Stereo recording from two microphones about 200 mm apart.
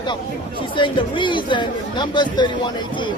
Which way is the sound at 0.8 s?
25° left (ahead or behind).